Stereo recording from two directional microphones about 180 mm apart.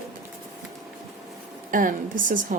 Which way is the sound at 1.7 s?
50° right (ahead or behind).